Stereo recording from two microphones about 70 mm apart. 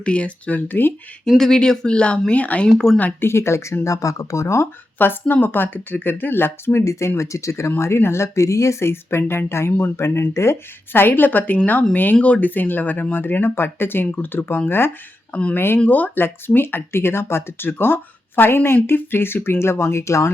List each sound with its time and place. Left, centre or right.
0.0 s speech: centre
1.4 s speech: centre
2.6 s speech: centre
3.0 s speech: left
5.3 s speech: left
7.2 s speech: left
15.3 s speech: centre
15.5 s speech: left